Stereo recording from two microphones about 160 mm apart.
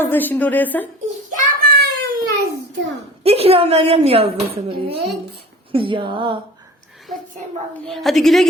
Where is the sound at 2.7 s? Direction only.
90° right.